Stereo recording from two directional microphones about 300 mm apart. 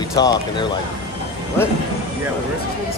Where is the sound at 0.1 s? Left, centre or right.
Centre.